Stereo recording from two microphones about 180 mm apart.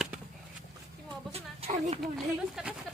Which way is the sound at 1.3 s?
35° right (ahead or behind).